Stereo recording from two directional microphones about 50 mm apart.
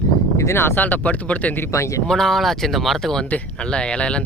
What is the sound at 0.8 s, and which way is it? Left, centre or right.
Speech, left.